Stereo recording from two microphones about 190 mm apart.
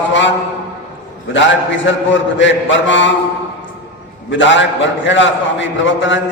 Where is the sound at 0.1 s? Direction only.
75° left (ahead or behind).